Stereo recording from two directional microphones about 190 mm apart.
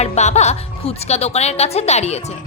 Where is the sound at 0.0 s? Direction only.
35° left (ahead or behind).